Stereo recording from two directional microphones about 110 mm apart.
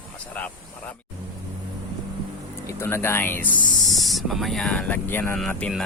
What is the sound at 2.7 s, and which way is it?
Speech, 25° left (ahead or behind).